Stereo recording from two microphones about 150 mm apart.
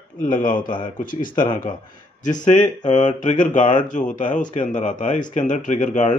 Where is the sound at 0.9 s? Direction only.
65° left (ahead or behind).